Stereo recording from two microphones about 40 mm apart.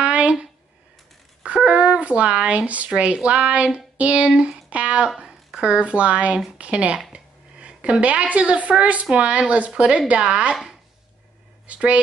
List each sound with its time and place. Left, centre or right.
0.0 s a sound: right
1.4 s speech: right
7.1 s a sound: right
8.0 s speech: right
10.5 s speech: centre
11.6 s speech: right